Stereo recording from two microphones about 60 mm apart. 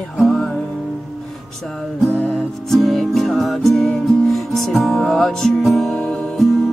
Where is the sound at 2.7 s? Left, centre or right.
Centre.